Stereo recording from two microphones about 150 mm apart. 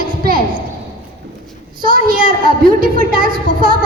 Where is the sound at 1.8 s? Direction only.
70° right (ahead or behind).